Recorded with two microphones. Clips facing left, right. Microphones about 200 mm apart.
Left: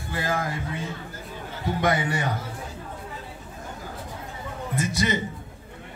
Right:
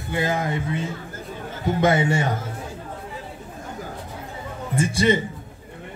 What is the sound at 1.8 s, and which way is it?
Speech, 25° right (ahead or behind).